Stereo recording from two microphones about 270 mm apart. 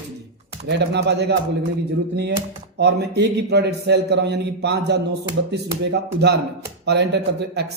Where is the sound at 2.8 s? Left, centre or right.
Right.